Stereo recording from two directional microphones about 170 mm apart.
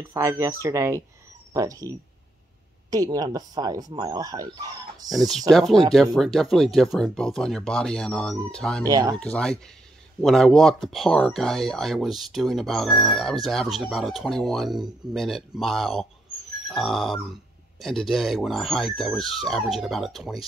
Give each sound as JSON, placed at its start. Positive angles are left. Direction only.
{"t": 0.0, "sound": "speech", "side_deg": -15}
{"t": 5.1, "sound": "speech", "side_deg": 0}
{"t": 8.8, "sound": "speech", "side_deg": -20}
{"t": 9.1, "sound": "speech", "side_deg": 5}